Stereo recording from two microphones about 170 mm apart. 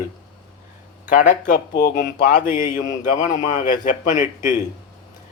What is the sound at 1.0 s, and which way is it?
Speech, 50° left (ahead or behind).